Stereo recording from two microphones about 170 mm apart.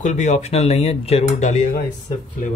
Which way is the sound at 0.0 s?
45° left (ahead or behind).